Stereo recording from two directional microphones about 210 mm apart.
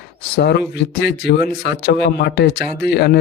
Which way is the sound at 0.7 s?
55° left (ahead or behind).